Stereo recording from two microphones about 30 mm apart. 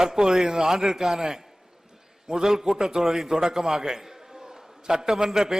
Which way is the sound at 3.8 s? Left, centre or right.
Centre.